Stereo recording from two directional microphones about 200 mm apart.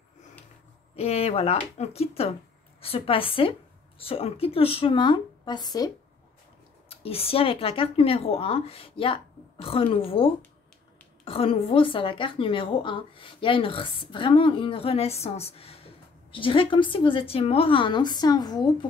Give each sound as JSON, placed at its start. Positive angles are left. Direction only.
{"t": 0.9, "sound": "a woman's voice", "side_deg": 30}
{"t": 7.0, "sound": "a woman's voice", "side_deg": 30}